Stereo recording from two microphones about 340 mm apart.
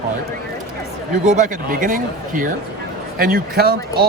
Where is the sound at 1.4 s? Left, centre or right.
Right.